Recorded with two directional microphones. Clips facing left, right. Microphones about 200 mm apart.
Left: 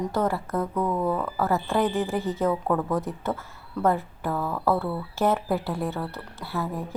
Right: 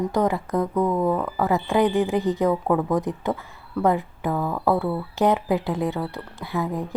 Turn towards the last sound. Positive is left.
turn(degrees=-15)  # may be behind; listen again after turning